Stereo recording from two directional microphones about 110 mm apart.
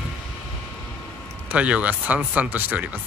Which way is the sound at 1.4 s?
10° right (ahead or behind).